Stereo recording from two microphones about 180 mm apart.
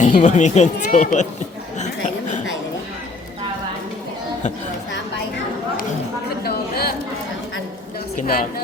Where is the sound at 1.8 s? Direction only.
40° left (ahead or behind).